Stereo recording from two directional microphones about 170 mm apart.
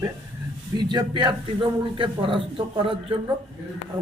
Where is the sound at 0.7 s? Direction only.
25° right (ahead or behind).